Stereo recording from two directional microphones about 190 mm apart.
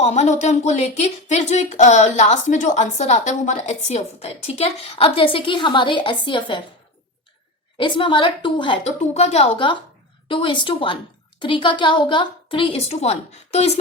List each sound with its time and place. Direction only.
0.0 s speech: 35° left (ahead or behind)
7.8 s a woman's voice: 25° left (ahead or behind)